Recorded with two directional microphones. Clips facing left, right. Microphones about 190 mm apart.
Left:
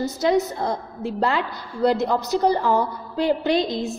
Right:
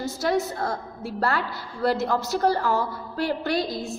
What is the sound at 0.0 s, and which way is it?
A woman's voice, 20° left (ahead or behind).